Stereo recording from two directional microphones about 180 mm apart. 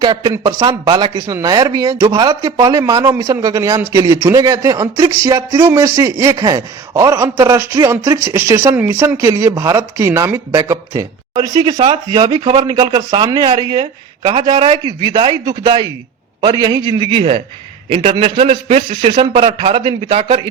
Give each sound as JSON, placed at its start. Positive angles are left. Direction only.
{"t": 0.0, "sound": "a man's voice", "side_deg": -25}